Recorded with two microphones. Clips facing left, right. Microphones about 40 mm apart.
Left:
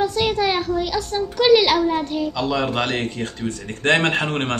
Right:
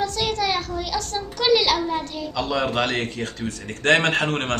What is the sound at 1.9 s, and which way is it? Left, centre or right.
Speech, centre.